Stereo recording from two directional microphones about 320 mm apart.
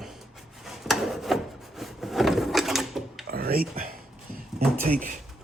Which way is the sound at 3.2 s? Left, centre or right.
Right.